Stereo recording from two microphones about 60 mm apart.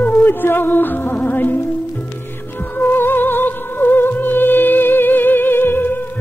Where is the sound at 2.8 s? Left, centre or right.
Left.